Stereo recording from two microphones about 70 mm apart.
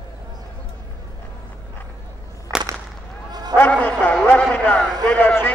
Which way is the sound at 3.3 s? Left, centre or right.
Right.